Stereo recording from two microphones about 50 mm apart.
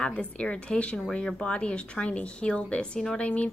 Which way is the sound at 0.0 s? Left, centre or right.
Left.